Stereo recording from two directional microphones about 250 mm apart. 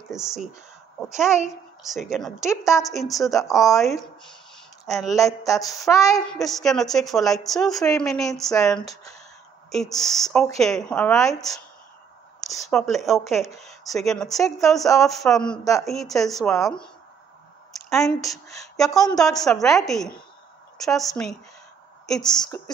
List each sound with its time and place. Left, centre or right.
0.1 s speech: centre
2.5 s speech: centre
2.9 s speech: centre
5.2 s speech: centre
6.3 s speech: centre
12.6 s speech: centre
17.7 s a woman's voice: centre
22.3 s speech: centre